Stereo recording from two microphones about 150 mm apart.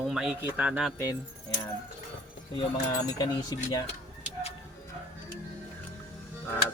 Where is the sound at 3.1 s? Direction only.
25° left (ahead or behind).